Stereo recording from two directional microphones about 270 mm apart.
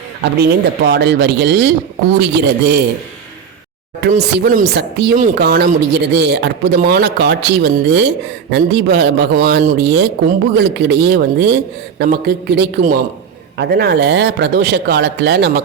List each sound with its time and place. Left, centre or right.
0.2 s a man's voice: right
4.0 s a man's voice: right